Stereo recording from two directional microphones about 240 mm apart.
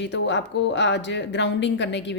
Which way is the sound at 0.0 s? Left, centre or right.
Left.